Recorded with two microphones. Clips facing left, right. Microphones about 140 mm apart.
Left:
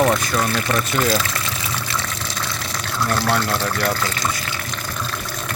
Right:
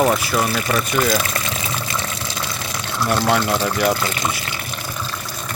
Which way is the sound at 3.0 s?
20° right (ahead or behind).